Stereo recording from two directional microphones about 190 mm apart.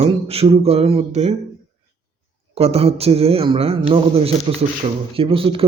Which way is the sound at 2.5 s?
30° right (ahead or behind).